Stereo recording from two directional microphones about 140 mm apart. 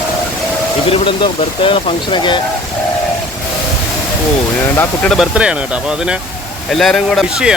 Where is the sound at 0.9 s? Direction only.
40° left (ahead or behind).